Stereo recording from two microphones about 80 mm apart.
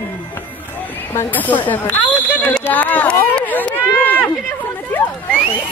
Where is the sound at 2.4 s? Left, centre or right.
Left.